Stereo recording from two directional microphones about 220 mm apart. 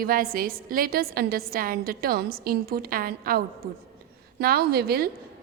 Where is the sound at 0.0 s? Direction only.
40° right (ahead or behind).